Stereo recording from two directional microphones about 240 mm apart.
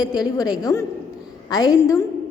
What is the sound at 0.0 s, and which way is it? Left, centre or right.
A woman's voice, centre.